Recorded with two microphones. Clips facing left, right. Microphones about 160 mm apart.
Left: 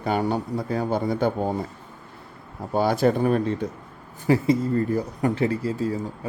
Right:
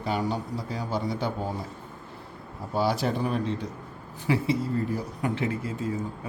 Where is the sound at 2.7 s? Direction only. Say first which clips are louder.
Left 6 dB; 50° left (ahead or behind).